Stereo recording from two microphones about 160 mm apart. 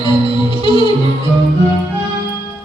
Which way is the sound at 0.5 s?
35° left (ahead or behind).